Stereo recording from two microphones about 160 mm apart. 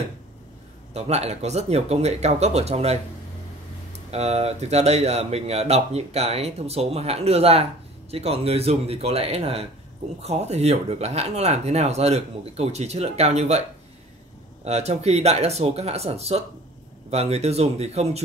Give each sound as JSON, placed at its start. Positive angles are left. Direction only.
{"t": 0.9, "sound": "speech", "side_deg": -40}
{"t": 4.1, "sound": "speech", "side_deg": -40}